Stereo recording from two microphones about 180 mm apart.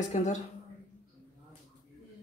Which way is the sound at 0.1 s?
40° left (ahead or behind).